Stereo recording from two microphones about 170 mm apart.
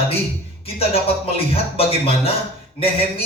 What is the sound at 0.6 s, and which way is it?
Music, 35° left (ahead or behind).